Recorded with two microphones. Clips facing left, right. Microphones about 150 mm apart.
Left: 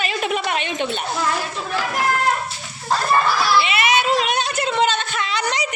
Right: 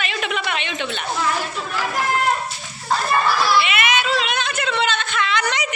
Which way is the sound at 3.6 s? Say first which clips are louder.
Left 1 dB; 35° left (ahead or behind).